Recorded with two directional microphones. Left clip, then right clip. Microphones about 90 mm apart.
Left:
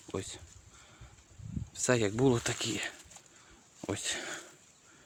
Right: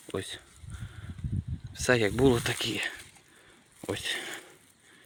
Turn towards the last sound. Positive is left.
turn(degrees=30)  # may be behind; listen again after turning